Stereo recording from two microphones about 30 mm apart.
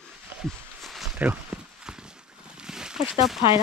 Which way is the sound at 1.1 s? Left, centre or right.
Right.